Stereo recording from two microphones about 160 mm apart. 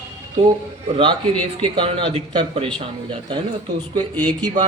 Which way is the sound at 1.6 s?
35° right (ahead or behind).